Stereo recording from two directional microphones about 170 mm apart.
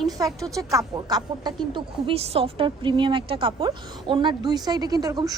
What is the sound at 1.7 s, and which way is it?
A woman's voice, 35° right (ahead or behind).